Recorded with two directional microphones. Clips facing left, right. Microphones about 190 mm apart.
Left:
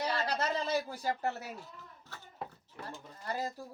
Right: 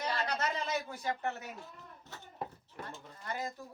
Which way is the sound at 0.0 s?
35° left (ahead or behind).